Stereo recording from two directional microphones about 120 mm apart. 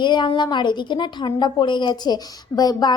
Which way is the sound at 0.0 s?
40° left (ahead or behind).